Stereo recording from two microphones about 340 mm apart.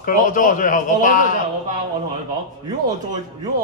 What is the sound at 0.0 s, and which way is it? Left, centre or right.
A man's voice, left.